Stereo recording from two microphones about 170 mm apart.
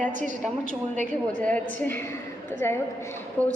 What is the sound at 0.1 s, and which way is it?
Speech, 45° right (ahead or behind).